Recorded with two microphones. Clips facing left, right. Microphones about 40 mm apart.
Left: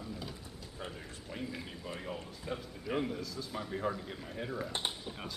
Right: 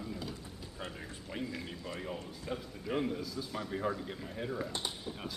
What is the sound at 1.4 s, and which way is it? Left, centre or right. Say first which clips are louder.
Speech: right 2 dB; centre.